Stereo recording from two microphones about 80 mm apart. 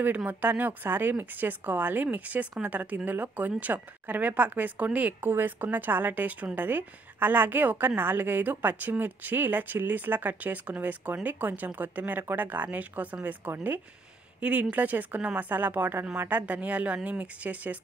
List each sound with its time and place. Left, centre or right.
0.0 s a woman's voice: right